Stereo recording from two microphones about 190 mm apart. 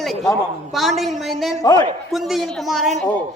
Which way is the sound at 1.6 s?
20° left (ahead or behind).